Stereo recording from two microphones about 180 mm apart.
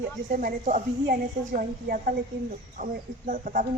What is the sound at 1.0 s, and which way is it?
A woman's voice, 60° right (ahead or behind).